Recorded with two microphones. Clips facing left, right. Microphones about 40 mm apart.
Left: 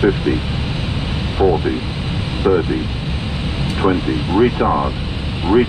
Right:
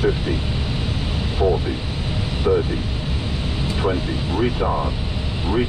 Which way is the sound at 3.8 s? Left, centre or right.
Left.